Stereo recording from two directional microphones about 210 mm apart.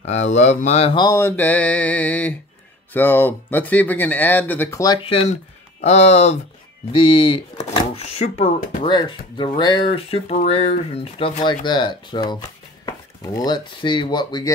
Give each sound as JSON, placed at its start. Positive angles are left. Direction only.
{"t": 0.0, "sound": "speech", "side_deg": 30}